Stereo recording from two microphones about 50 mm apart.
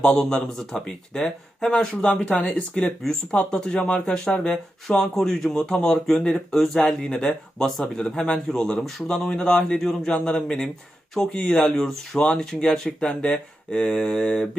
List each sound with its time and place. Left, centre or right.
0.0 s speech: centre
4.5 s speech: centre